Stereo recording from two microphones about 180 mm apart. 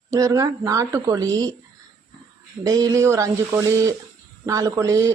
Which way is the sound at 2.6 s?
20° right (ahead or behind).